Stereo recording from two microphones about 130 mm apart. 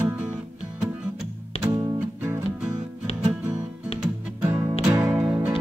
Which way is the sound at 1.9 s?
15° right (ahead or behind).